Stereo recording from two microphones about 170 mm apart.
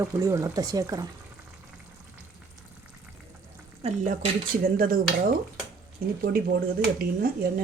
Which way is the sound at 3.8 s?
35° right (ahead or behind).